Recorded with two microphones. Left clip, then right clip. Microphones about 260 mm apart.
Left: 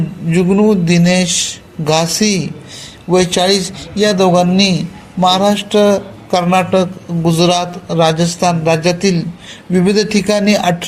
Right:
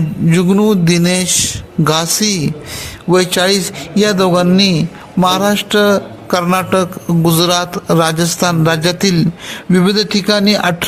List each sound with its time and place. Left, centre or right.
0.3 s a man's voice: right